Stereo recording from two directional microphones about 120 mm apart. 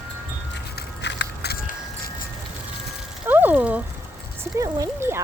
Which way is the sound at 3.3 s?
15° right (ahead or behind).